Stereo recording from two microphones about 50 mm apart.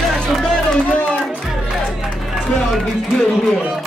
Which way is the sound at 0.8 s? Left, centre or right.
Left.